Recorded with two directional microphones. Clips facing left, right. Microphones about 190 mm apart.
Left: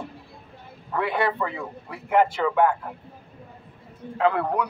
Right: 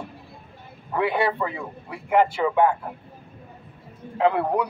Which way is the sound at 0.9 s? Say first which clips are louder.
Right 2 dB; 15° right (ahead or behind).